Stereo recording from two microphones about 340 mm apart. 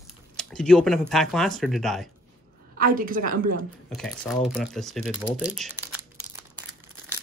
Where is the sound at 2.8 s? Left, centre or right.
Right.